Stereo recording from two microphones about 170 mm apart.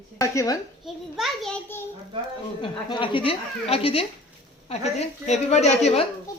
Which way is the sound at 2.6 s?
30° left (ahead or behind).